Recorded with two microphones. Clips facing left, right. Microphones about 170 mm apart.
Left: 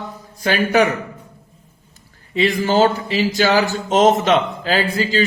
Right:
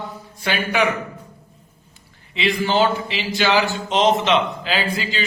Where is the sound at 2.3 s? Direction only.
45° left (ahead or behind).